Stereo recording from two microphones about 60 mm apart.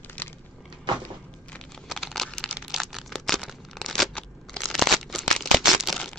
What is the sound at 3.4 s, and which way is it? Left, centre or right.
Tearing, centre.